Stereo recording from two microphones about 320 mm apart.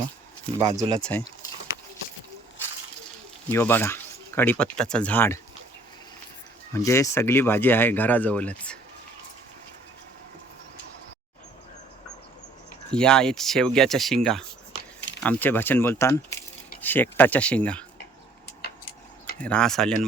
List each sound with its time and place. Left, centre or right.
0.6 s speech: centre
1.0 s speech: centre
3.5 s speech: centre
6.7 s speech: centre
12.9 s speech: centre
14.8 s a sound: left
15.2 s speech: centre
19.4 s speech: centre